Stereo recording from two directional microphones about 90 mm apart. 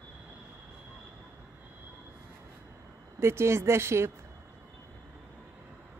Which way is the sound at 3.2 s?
30° right (ahead or behind).